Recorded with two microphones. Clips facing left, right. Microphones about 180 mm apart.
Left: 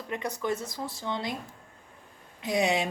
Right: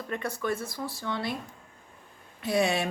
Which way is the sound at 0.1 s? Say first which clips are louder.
Even; 20° left (ahead or behind).